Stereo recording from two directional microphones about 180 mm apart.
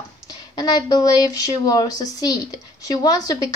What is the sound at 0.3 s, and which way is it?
Speech, 20° left (ahead or behind).